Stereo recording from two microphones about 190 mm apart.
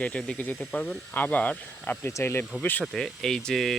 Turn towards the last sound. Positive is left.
turn(degrees=0)  # may be behind; listen again after turning